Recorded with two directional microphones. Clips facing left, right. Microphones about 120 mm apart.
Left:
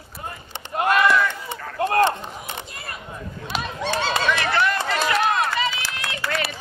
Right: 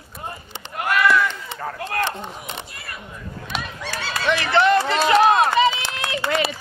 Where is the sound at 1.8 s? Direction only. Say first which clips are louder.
Left 8 dB; 35° left (ahead or behind).